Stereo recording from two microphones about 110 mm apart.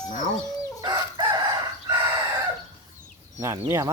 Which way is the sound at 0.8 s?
35° right (ahead or behind).